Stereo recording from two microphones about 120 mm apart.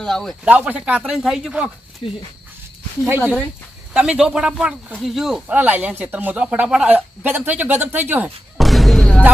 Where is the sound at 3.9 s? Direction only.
5° right (ahead or behind).